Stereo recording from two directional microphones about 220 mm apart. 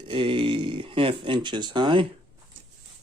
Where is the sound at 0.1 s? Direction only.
25° right (ahead or behind).